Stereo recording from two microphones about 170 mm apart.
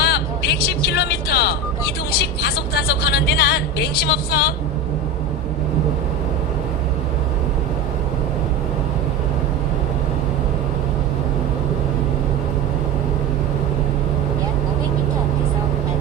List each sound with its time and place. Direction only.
0.0 s music: 70° left (ahead or behind)